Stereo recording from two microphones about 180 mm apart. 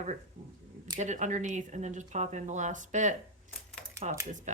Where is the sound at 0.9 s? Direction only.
40° right (ahead or behind).